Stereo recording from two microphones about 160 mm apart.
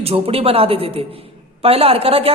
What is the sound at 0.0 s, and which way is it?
A man's voice, 35° right (ahead or behind).